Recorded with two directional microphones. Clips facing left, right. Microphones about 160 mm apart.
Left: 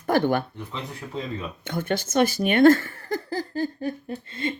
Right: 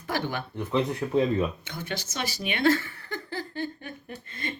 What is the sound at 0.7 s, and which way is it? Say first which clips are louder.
Speech: right 9 dB; 55° right (ahead or behind).